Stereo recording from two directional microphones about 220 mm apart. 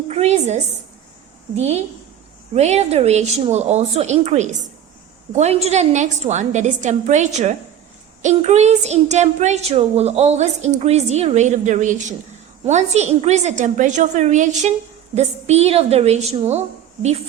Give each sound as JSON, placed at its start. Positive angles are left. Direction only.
{"t": 0.1, "sound": "a woman's voice", "side_deg": -30}